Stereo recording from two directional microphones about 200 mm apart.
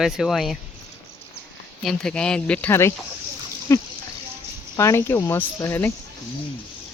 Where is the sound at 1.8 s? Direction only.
5° left (ahead or behind).